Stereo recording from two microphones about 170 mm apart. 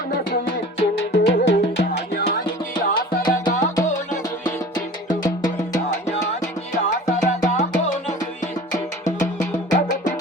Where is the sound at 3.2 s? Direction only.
25° left (ahead or behind).